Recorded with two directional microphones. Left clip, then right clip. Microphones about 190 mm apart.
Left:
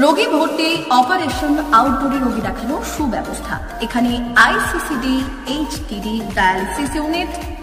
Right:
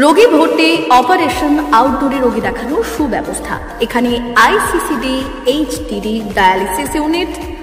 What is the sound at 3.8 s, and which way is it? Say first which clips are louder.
A woman's voice: right 6 dB; 20° right (ahead or behind).